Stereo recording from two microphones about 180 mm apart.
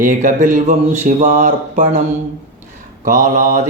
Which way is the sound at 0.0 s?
45° right (ahead or behind).